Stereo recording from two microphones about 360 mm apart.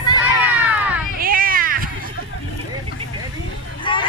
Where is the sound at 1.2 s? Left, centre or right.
Right.